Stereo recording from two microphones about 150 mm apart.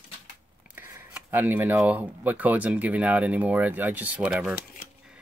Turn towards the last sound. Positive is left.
turn(degrees=-10)  # may be behind; listen again after turning